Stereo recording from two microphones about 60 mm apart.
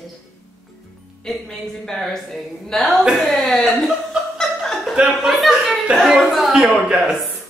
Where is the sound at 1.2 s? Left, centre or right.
Centre.